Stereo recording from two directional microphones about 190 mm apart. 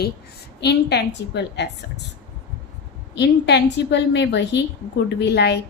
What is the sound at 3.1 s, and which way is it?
A woman's voice, 65° left (ahead or behind).